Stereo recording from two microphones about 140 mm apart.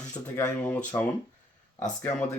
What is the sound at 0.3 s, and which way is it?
Speech, 10° left (ahead or behind).